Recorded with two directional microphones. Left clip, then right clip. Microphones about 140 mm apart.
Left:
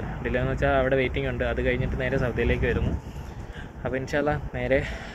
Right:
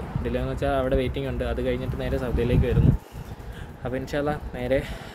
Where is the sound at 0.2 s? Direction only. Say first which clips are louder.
Left 2 dB; 35° right (ahead or behind).